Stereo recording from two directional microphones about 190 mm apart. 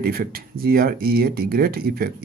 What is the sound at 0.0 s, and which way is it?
Speech, 50° right (ahead or behind).